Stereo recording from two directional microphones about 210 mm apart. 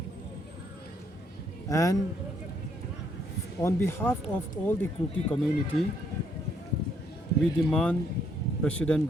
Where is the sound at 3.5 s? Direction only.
10° left (ahead or behind).